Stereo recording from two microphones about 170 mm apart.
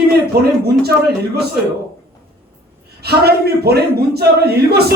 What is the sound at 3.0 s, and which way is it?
A man's voice, 70° right (ahead or behind).